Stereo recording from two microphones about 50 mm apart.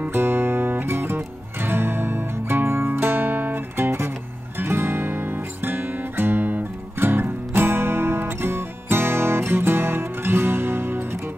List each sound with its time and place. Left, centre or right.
0.1 s music: right